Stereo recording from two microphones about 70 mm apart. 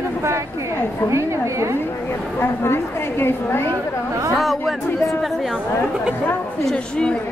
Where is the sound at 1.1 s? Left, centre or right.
Right.